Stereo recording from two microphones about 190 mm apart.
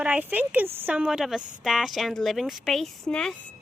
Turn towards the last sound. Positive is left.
turn(degrees=5)  # may be behind; listen again after turning